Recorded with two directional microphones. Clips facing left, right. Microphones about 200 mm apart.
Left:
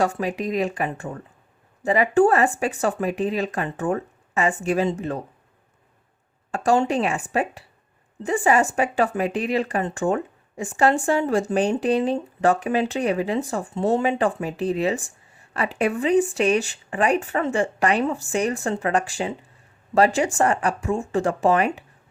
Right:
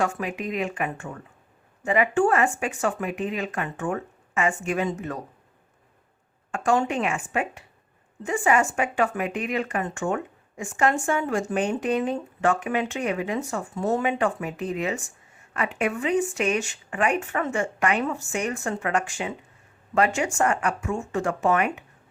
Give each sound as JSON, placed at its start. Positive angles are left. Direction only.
{"t": 0.0, "sound": "speech", "side_deg": 35}
{"t": 6.5, "sound": "speech", "side_deg": 35}